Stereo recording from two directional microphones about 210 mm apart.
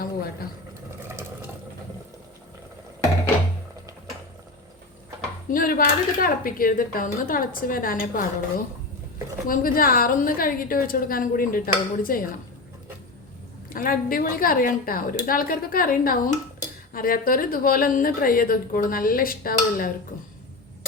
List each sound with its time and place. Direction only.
1.0 s sewing machine: 10° right (ahead or behind)
5.5 s a woman's voice: 45° left (ahead or behind)
13.7 s a woman's voice: 40° left (ahead or behind)